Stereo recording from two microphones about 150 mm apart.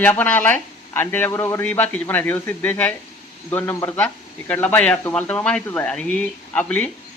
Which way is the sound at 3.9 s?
10° left (ahead or behind).